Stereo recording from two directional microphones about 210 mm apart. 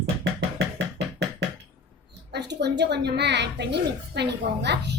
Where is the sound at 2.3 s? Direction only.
55° right (ahead or behind).